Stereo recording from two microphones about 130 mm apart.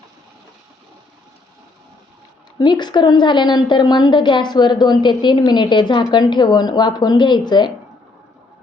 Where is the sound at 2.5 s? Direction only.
35° left (ahead or behind).